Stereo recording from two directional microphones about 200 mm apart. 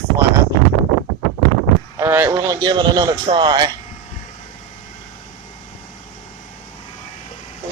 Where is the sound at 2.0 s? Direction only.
10° right (ahead or behind).